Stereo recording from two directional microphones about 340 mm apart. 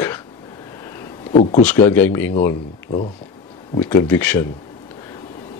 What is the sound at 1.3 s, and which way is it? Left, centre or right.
Speech, centre.